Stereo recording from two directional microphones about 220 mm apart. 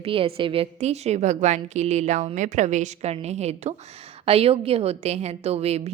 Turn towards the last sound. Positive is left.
turn(degrees=-30)  # may be behind; listen again after turning